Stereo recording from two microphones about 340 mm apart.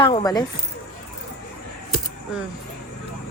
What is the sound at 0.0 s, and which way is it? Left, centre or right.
Speech, centre.